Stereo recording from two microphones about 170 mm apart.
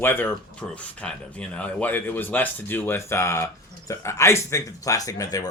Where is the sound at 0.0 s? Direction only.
10° left (ahead or behind).